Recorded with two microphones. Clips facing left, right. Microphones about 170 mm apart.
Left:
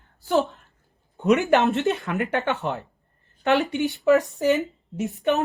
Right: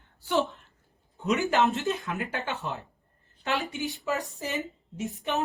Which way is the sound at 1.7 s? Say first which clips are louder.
Left 6 dB; 65° left (ahead or behind).